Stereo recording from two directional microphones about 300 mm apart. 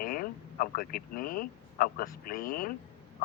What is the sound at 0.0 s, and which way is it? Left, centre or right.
Speech, left.